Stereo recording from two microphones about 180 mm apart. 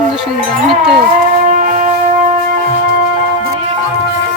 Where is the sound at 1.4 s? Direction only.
45° right (ahead or behind).